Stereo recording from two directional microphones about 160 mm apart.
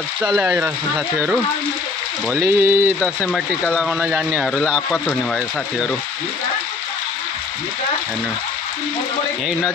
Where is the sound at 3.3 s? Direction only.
Centre (ahead or behind).